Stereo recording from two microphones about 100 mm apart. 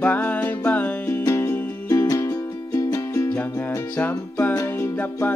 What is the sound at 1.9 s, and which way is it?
Music, 35° left (ahead or behind).